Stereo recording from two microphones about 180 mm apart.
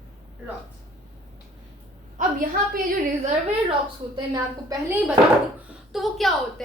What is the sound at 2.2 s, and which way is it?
Speech, 50° right (ahead or behind).